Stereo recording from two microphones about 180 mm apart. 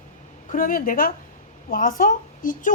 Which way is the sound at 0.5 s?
50° left (ahead or behind).